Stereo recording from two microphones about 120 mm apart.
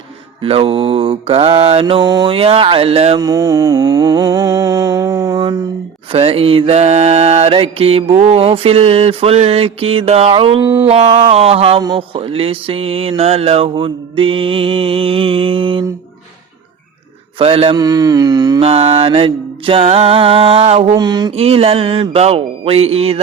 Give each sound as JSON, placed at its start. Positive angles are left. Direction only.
{"t": 0.4, "sound": "mantra", "side_deg": -55}
{"t": 2.3, "sound": "mantra", "side_deg": -50}
{"t": 3.2, "sound": "music", "side_deg": -30}
{"t": 5.4, "sound": "a sound", "side_deg": -35}
{"t": 6.1, "sound": "mantra", "side_deg": -50}
{"t": 10.8, "sound": "music", "side_deg": -50}
{"t": 11.9, "sound": "mantra", "side_deg": -50}
{"t": 17.3, "sound": "mantra", "side_deg": -50}
{"t": 17.7, "sound": "music", "side_deg": -30}
{"t": 18.6, "sound": "mantra", "side_deg": -55}
{"t": 20.9, "sound": "music", "side_deg": -35}
{"t": 21.3, "sound": "music", "side_deg": -55}